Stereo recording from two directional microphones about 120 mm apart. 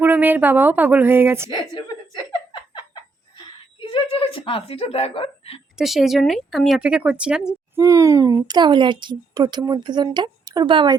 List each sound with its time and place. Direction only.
0.0 s speech: 15° right (ahead or behind)
1.5 s giggle: 35° left (ahead or behind); by 5.5 s 55° left (ahead or behind)
5.7 s speech: centre (ahead or behind)
7.8 s a woman's voice: 25° right (ahead or behind); by 10.9 s 40° right (ahead or behind)